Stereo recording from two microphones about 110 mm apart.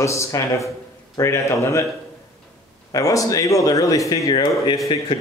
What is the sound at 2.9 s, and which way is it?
A man's voice, 30° left (ahead or behind).